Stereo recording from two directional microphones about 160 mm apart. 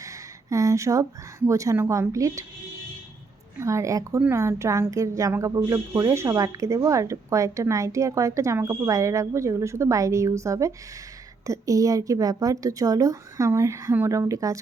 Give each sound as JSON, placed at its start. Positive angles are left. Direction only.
{"t": 0.5, "sound": "speech", "side_deg": -20}
{"t": 3.6, "sound": "speech", "side_deg": -20}